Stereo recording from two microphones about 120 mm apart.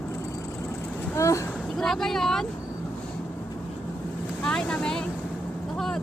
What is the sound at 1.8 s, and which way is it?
Vehicle, 5° left (ahead or behind).